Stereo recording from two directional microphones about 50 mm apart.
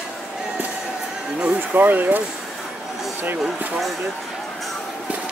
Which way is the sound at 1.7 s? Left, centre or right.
Right.